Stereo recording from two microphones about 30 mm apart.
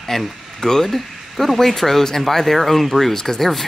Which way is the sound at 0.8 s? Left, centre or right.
Centre.